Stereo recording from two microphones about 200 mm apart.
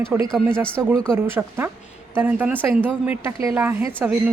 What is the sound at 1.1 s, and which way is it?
Speech, 10° right (ahead or behind).